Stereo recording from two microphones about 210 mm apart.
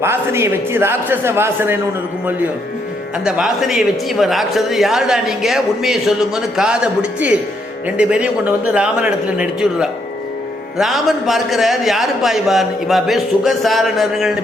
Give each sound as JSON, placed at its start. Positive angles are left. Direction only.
{"t": 0.0, "sound": "a man's voice", "side_deg": -10}
{"t": 3.2, "sound": "a man's voice", "side_deg": -5}